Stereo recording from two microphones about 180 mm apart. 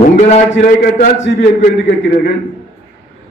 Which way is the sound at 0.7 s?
70° left (ahead or behind).